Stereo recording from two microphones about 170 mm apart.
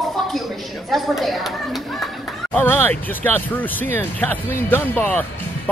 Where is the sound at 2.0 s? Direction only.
10° left (ahead or behind).